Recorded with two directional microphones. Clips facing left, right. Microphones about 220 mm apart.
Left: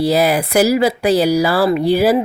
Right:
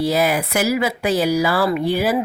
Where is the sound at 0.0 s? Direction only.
35° left (ahead or behind).